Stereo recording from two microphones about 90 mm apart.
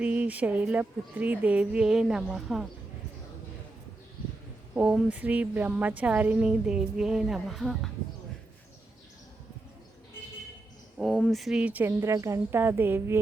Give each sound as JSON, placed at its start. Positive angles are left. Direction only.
{"t": 0.0, "sound": "a woman's voice", "side_deg": -15}
{"t": 4.7, "sound": "a sound", "side_deg": -15}
{"t": 5.0, "sound": "a woman's voice", "side_deg": -15}
{"t": 10.9, "sound": "speech", "side_deg": 5}
{"t": 11.6, "sound": "speech", "side_deg": -20}
{"t": 11.9, "sound": "speech", "side_deg": -35}